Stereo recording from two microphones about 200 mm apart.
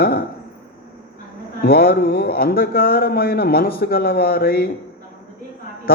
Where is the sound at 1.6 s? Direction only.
50° left (ahead or behind).